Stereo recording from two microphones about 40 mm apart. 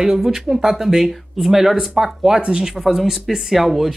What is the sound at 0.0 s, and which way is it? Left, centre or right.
Speech, centre.